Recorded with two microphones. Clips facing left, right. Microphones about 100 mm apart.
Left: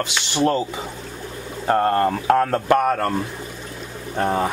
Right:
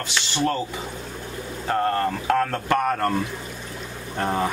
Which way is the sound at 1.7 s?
40° left (ahead or behind).